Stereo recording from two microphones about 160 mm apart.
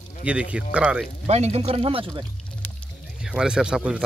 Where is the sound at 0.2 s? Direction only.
10° right (ahead or behind).